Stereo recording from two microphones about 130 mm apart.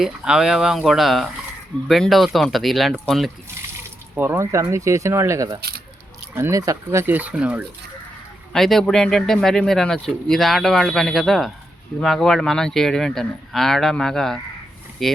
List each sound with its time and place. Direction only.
0.0 s speech: 5° right (ahead or behind)
4.1 s speech: 15° right (ahead or behind)
8.5 s speech: centre (ahead or behind)